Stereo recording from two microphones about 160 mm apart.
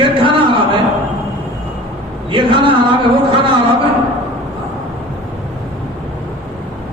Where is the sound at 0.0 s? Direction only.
30° right (ahead or behind).